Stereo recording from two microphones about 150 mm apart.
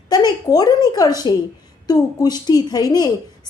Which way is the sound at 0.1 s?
25° left (ahead or behind).